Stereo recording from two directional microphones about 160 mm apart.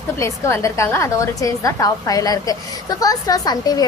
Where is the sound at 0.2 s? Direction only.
15° left (ahead or behind).